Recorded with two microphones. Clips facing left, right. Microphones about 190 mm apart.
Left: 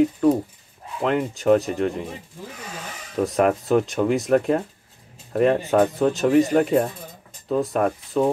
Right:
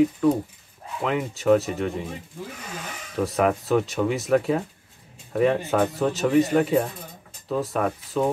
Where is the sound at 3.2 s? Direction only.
Centre (ahead or behind).